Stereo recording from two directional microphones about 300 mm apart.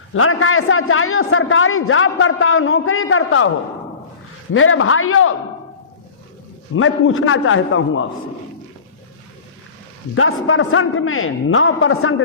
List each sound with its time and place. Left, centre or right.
0.1 s a man's voice: left
4.5 s a man's voice: left
6.7 s a man's voice: left
10.2 s a man's voice: left